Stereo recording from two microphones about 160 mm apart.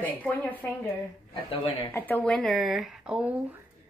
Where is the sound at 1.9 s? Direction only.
15° left (ahead or behind).